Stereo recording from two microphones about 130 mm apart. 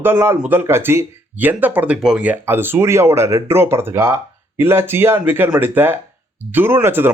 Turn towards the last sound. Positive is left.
turn(degrees=-15)  # may be behind; listen again after turning